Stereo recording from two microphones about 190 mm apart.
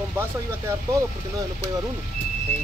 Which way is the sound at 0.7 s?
15° right (ahead or behind).